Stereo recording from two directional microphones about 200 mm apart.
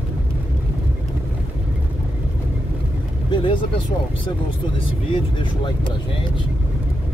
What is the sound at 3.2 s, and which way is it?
Vehicle, 25° left (ahead or behind).